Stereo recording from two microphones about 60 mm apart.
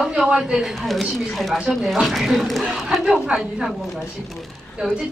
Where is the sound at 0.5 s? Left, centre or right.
Centre.